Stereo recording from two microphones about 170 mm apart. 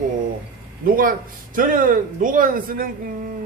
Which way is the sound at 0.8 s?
55° right (ahead or behind).